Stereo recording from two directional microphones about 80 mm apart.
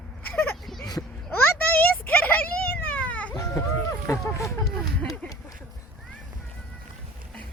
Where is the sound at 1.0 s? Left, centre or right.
Left.